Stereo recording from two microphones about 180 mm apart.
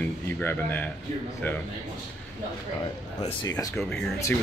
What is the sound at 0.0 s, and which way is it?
Speech, 10° left (ahead or behind).